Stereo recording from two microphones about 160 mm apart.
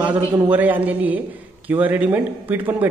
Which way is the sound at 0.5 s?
10° right (ahead or behind).